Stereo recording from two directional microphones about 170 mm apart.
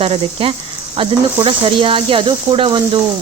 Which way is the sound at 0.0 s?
35° right (ahead or behind).